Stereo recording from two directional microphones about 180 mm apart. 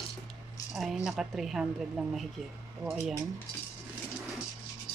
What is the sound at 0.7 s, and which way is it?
Speech, centre (ahead or behind).